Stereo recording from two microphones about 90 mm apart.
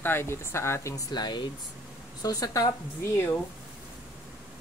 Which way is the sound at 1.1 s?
55° left (ahead or behind).